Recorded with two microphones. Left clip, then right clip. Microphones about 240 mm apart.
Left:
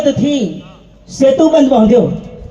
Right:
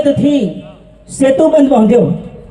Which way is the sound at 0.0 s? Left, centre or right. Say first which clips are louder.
Right 2 dB; right.